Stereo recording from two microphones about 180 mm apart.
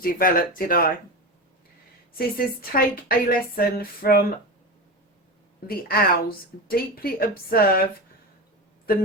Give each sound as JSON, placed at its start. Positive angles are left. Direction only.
{"t": 0.0, "sound": "speech", "side_deg": 55}
{"t": 2.1, "sound": "a woman's voice", "side_deg": 55}
{"t": 5.6, "sound": "a woman's voice", "side_deg": 55}